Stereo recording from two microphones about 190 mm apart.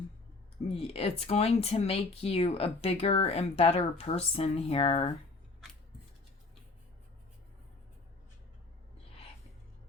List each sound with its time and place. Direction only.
0.7 s speech: 30° left (ahead or behind)